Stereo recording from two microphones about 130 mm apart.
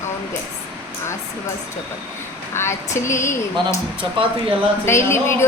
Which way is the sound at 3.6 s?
35° right (ahead or behind).